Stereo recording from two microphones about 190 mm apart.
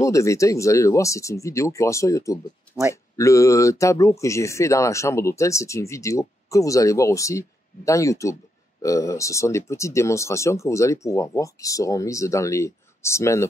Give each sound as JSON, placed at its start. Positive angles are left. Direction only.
{"t": 0.0, "sound": "speech", "side_deg": 15}
{"t": 2.7, "sound": "speech", "side_deg": -15}
{"t": 3.2, "sound": "speech", "side_deg": 15}